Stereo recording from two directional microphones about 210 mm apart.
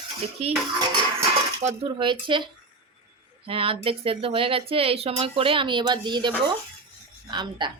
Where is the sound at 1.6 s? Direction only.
25° right (ahead or behind).